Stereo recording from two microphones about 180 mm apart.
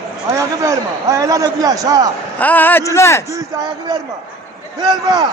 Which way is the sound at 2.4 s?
10° left (ahead or behind).